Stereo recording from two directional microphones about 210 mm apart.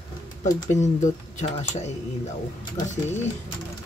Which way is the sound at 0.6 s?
35° left (ahead or behind).